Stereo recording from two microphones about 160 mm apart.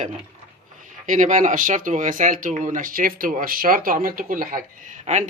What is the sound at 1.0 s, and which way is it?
Speech, 55° right (ahead or behind).